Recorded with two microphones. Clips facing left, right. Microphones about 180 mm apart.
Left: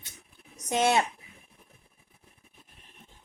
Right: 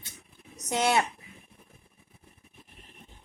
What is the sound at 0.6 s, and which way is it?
Speech, 20° left (ahead or behind).